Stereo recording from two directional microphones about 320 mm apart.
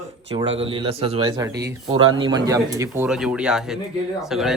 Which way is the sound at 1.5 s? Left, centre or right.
Right.